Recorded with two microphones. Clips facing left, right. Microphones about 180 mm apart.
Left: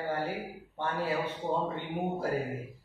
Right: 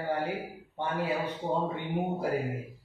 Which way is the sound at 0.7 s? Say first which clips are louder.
Right 1 dB; 15° right (ahead or behind).